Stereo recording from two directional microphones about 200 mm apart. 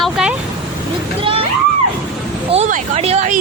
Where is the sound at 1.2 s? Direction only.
25° right (ahead or behind).